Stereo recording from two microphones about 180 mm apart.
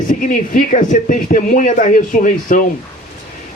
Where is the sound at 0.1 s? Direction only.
50° left (ahead or behind).